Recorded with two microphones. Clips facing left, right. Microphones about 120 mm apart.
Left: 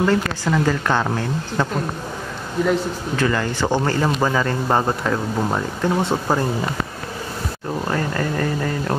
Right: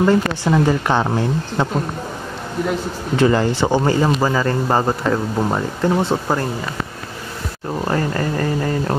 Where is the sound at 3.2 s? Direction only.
25° right (ahead or behind).